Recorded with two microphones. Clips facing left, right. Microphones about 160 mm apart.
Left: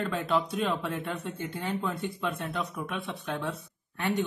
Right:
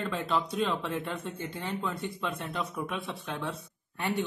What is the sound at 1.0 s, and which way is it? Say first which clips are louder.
Speech: left 1 dB; centre (ahead or behind).